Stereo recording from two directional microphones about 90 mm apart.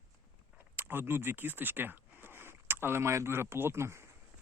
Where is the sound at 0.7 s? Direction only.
25° right (ahead or behind).